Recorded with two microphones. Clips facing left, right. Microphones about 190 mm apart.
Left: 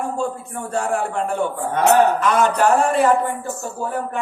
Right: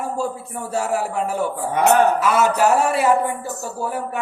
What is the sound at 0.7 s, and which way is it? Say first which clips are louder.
A man's voice: even; 5° right (ahead or behind).